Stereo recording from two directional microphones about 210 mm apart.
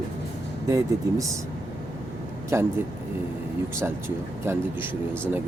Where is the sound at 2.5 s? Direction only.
10° right (ahead or behind).